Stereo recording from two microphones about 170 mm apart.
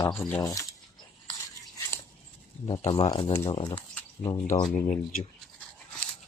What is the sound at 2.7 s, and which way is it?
Speech, 35° left (ahead or behind).